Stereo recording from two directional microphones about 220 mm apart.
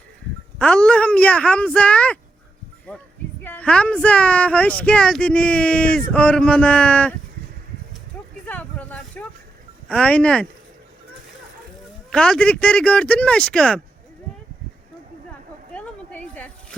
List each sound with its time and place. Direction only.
0.6 s speech: 5° left (ahead or behind)
8.4 s vehicle: 5° left (ahead or behind)
9.9 s speech: 5° left (ahead or behind)
12.1 s speech: 5° left (ahead or behind)
15.7 s a sound: 5° left (ahead or behind)